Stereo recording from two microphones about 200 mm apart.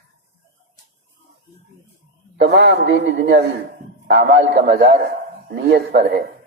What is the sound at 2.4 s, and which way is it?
A man's voice, 60° right (ahead or behind).